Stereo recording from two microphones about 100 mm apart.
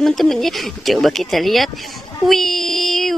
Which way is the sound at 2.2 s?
5° left (ahead or behind).